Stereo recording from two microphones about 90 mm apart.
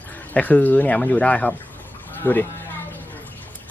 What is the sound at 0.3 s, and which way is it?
Speech, 15° left (ahead or behind).